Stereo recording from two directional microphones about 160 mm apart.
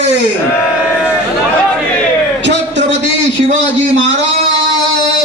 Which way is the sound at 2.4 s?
90° right.